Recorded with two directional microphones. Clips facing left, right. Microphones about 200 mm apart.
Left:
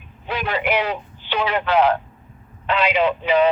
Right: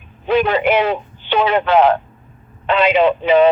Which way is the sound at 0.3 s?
25° right (ahead or behind).